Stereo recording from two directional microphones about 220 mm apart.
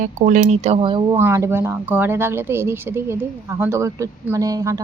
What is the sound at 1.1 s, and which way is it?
Speech, 10° right (ahead or behind).